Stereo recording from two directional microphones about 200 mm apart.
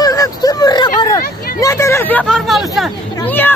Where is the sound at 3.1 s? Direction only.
10° left (ahead or behind).